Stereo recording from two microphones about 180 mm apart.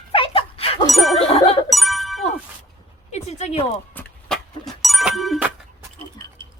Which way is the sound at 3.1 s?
40° left (ahead or behind).